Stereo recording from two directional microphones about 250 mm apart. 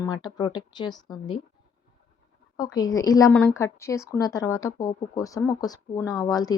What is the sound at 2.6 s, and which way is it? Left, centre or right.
A woman's voice, centre.